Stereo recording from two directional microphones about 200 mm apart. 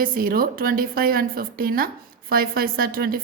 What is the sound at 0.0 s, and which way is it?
Speech, 45° right (ahead or behind).